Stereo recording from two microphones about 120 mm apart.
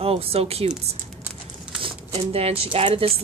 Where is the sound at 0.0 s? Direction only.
55° right (ahead or behind).